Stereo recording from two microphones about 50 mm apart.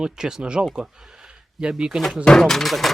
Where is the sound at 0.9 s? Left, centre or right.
Centre.